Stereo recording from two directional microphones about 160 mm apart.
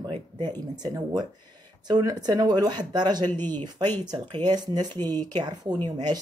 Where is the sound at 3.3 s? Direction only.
10° left (ahead or behind).